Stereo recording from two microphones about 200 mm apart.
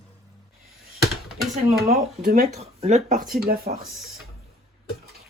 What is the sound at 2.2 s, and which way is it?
Speech, 45° right (ahead or behind).